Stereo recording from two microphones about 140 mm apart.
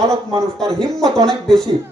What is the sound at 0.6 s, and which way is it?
Music, 5° left (ahead or behind).